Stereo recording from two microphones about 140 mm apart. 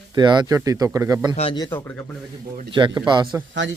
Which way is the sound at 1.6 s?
15° left (ahead or behind).